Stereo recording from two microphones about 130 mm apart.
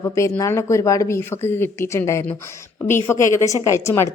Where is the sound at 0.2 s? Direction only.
25° left (ahead or behind).